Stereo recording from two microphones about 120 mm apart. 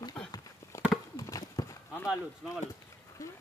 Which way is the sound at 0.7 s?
25° left (ahead or behind).